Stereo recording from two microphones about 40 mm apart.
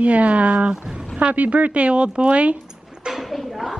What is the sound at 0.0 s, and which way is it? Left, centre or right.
Speech, right.